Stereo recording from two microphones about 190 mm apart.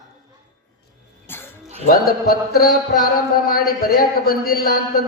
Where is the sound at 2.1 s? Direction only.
50° left (ahead or behind).